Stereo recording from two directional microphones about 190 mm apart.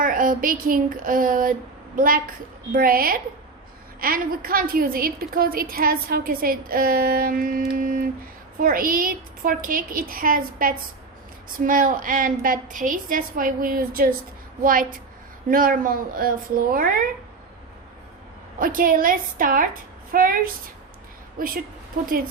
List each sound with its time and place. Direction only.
0.0 s a woman's voice: 45° right (ahead or behind)
18.6 s a woman's voice: 45° right (ahead or behind)